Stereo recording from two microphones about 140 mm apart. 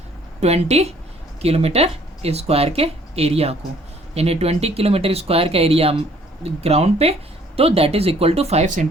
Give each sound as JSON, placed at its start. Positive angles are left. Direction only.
{"t": 0.3, "sound": "speech", "side_deg": -50}